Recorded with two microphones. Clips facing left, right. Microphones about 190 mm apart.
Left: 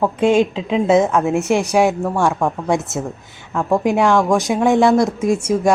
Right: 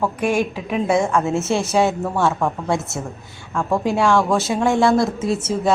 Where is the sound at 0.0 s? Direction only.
25° left (ahead or behind).